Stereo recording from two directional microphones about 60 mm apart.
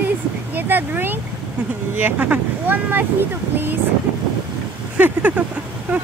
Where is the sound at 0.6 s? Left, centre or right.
Right.